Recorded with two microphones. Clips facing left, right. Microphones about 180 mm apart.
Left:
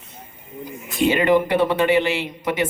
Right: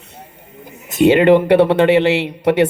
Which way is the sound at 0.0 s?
65° right (ahead or behind).